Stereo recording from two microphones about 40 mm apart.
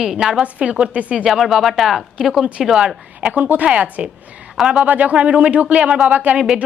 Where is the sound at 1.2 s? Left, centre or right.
Centre.